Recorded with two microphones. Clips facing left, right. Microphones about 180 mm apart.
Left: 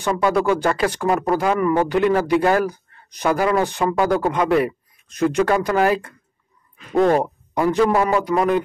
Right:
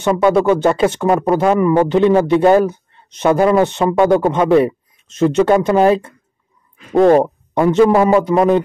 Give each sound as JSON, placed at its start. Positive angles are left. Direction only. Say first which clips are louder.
{"t": 0.0, "sound": "speech", "louder": "right 6 dB", "side_deg": -25}